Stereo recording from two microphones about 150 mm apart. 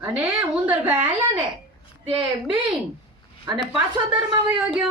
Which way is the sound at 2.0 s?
35° right (ahead or behind).